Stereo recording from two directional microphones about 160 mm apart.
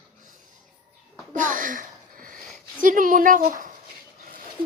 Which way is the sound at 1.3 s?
55° right (ahead or behind).